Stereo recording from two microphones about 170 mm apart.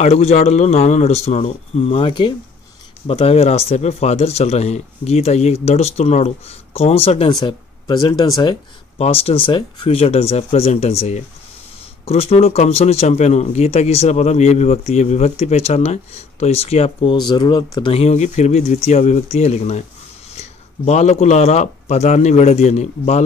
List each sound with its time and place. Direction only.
0.0 s speech: 40° left (ahead or behind)